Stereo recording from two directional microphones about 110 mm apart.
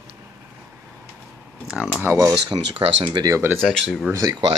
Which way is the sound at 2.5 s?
60° right (ahead or behind).